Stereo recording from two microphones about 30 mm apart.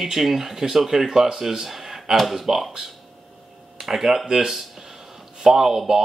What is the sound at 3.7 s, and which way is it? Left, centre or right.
Speech, centre.